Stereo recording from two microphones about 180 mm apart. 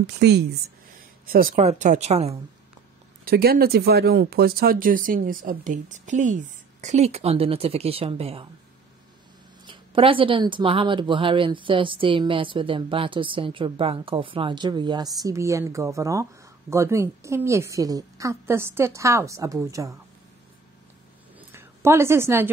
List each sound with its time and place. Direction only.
0.0 s a woman's voice: 70° right (ahead or behind)
1.2 s speech: 55° right (ahead or behind)
1.6 s speech: 40° right (ahead or behind)
3.3 s speech: 55° right (ahead or behind); by 8.5 s 30° right (ahead or behind)
9.7 s a woman's voice: 30° right (ahead or behind)
21.5 s a woman's voice: 15° right (ahead or behind)